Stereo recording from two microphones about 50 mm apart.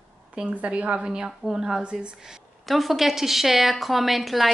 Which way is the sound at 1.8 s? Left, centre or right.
Right.